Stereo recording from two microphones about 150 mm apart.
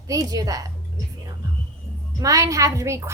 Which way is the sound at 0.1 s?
25° right (ahead or behind).